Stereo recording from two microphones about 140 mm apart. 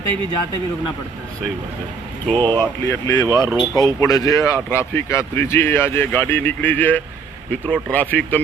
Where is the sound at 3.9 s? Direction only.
25° left (ahead or behind).